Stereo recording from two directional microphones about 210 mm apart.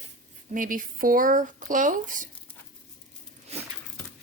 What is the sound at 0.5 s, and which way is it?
A woman's voice, 40° right (ahead or behind).